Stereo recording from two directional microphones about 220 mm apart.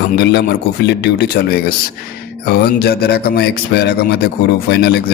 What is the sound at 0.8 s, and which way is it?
Speech, 50° left (ahead or behind).